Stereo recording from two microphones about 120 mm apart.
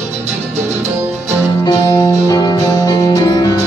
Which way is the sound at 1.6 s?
35° left (ahead or behind).